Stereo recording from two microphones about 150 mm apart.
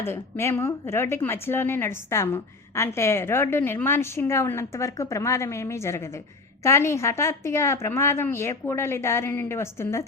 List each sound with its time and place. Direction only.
0.0 s a woman's voice: 15° left (ahead or behind)